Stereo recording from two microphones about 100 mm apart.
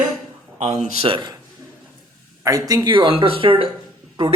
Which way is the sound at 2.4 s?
35° right (ahead or behind).